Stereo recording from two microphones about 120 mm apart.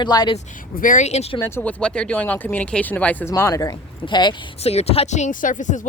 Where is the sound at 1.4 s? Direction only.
20° left (ahead or behind).